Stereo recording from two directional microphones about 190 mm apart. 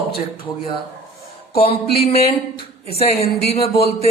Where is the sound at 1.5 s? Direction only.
30° left (ahead or behind).